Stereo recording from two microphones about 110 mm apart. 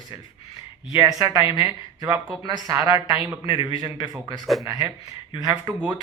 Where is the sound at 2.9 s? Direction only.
50° left (ahead or behind).